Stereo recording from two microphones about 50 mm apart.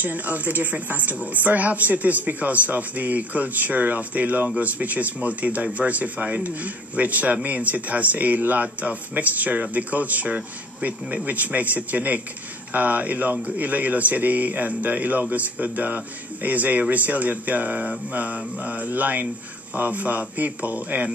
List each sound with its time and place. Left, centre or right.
0.0 s speech: right